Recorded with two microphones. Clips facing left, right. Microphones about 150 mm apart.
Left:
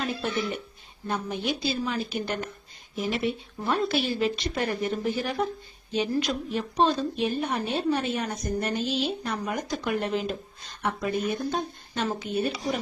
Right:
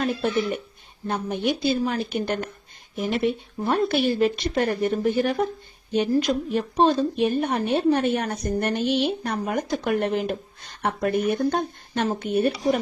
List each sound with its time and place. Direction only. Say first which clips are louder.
0.0 s a woman's voice: right 5 dB; 50° right (ahead or behind)
11.9 s a woman's voice: right 5 dB; 50° right (ahead or behind)